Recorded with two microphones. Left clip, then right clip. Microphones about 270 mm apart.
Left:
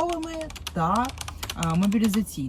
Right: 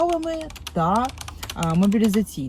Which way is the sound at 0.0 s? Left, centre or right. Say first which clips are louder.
Right 5 dB; centre.